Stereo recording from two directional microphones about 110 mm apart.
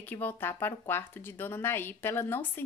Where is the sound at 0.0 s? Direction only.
15° left (ahead or behind).